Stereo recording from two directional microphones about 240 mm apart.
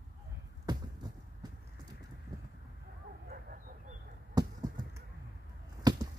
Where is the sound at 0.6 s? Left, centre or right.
Centre.